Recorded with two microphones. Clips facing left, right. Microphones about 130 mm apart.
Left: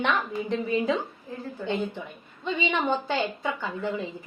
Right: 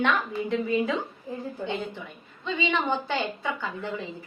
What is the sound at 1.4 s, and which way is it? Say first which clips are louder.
Speech: left 1 dB; 15° right (ahead or behind).